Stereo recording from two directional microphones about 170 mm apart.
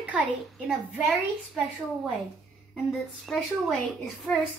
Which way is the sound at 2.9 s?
Centre (ahead or behind).